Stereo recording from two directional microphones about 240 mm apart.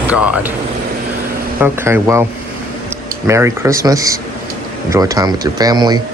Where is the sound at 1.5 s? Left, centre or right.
Centre.